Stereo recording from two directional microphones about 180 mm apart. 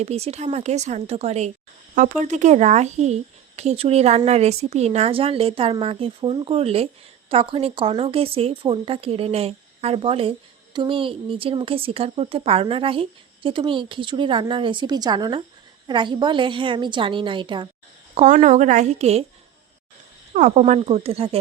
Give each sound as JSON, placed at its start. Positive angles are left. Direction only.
{"t": 0.0, "sound": "a woman's voice", "side_deg": -35}
{"t": 18.1, "sound": "a woman's voice", "side_deg": -40}
{"t": 20.3, "sound": "a woman's voice", "side_deg": -40}